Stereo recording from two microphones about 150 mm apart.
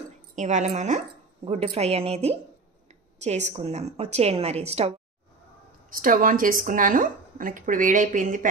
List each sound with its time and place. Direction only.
0.4 s speech: 50° right (ahead or behind)
5.9 s speech: 70° right (ahead or behind)